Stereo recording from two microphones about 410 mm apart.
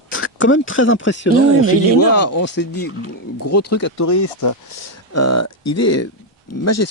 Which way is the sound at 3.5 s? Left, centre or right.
Left.